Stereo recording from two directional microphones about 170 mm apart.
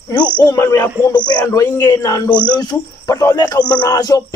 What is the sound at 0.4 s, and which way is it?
A man's voice, 15° left (ahead or behind).